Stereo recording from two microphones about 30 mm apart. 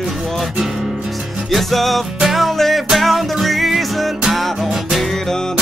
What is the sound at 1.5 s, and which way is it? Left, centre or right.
Music, centre.